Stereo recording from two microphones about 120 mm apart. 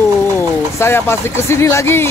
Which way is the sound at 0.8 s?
20° left (ahead or behind).